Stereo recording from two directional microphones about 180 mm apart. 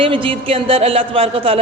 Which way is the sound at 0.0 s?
30° right (ahead or behind).